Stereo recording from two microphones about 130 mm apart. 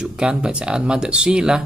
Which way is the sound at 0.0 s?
5° right (ahead or behind).